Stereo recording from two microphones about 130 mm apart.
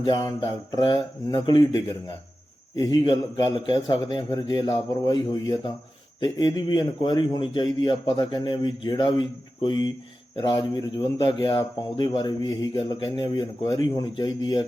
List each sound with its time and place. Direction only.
0.0 s speech: 35° left (ahead or behind)
2.7 s speech: 35° left (ahead or behind)